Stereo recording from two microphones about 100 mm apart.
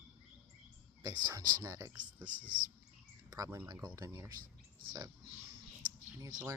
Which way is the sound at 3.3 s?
35° right (ahead or behind).